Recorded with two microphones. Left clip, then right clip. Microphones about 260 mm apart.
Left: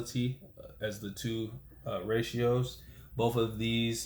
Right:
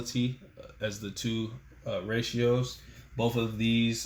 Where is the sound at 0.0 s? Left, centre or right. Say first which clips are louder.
Right 3 dB; right.